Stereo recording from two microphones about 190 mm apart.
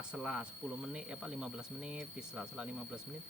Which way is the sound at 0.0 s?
5° right (ahead or behind).